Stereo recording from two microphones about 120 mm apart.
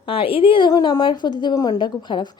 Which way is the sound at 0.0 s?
50° left (ahead or behind).